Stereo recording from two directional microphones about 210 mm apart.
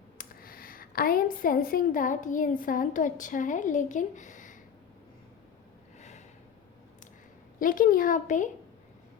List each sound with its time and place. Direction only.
0.2 s a woman's voice: 45° left (ahead or behind)
6.0 s snort: 35° left (ahead or behind)
7.6 s speech: 40° left (ahead or behind)